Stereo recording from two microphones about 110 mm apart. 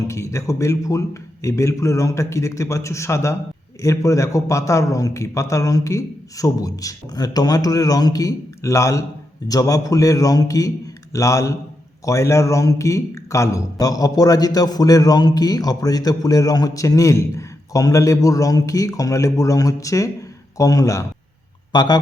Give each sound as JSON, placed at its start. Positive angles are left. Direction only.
{"t": 0.1, "sound": "a man's voice", "side_deg": 25}
{"t": 21.7, "sound": "speech", "side_deg": 40}